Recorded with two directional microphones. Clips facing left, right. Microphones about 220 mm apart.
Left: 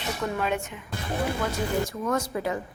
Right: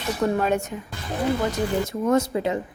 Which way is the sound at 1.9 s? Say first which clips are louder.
Right 7 dB; 25° right (ahead or behind).